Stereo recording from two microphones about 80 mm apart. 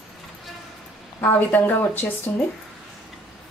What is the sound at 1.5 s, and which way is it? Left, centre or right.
Speech, left.